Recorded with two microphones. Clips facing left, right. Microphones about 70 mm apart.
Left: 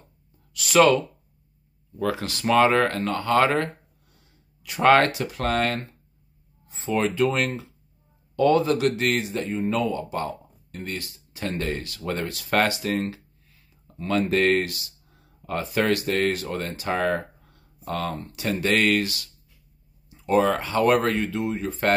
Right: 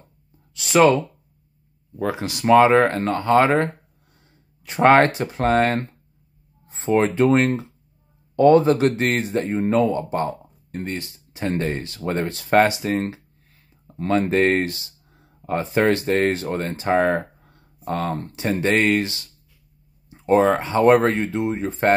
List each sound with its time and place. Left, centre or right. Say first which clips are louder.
0.6 s speech: right 2 dB; right
4.6 s speech: right 3 dB; right
9.7 s speech: right 7 dB; right
14.3 s speech: right 2 dB; right